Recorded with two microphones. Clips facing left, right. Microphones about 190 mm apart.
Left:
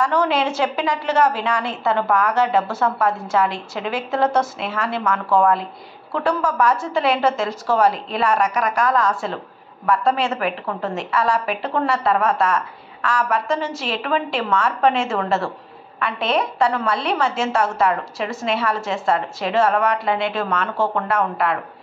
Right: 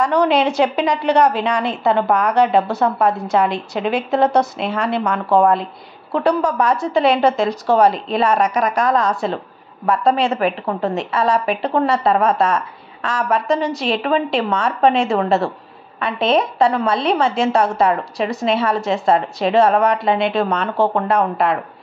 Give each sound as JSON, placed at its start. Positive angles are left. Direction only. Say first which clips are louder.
{"t": 0.0, "sound": "a woman's voice", "louder": "right 4 dB", "side_deg": -20}